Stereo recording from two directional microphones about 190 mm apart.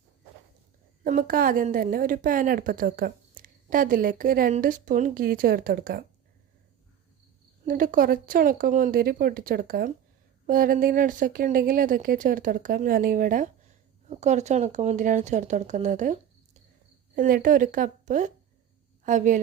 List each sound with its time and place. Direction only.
1.0 s speech: 50° right (ahead or behind)
7.6 s speech: 45° right (ahead or behind)
17.2 s a woman's voice: 45° right (ahead or behind)